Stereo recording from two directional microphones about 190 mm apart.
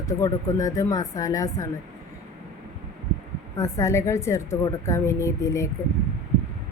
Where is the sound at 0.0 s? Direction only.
15° left (ahead or behind).